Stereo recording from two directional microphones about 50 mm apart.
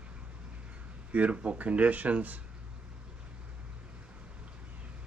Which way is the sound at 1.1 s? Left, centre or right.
Right.